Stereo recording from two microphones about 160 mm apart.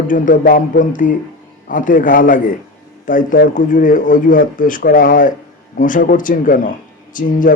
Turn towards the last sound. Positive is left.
turn(degrees=55)  # may be behind; listen again after turning